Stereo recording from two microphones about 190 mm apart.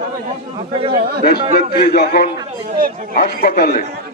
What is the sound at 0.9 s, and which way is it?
Speech, 50° right (ahead or behind).